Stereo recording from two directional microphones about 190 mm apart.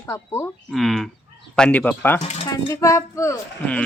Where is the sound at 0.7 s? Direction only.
Centre (ahead or behind).